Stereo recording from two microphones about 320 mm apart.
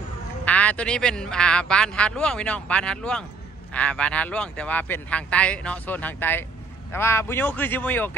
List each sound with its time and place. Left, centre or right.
0.5 s speech: centre